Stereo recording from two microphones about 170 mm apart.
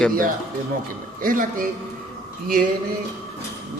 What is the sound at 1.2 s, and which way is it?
Speech, 55° right (ahead or behind).